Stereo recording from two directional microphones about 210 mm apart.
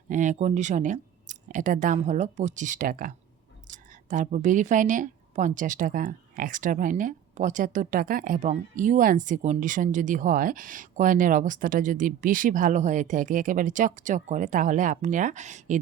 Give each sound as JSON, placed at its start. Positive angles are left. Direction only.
{"t": 0.1, "sound": "a woman's voice", "side_deg": -35}